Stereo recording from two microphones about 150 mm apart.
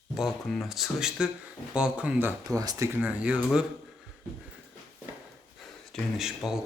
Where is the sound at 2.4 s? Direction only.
25° right (ahead or behind); by 3.6 s 5° right (ahead or behind).